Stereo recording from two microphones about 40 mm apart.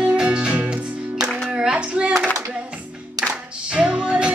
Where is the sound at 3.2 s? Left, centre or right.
Right.